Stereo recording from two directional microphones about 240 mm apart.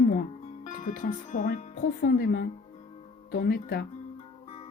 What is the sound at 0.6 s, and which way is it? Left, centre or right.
A woman's voice, left.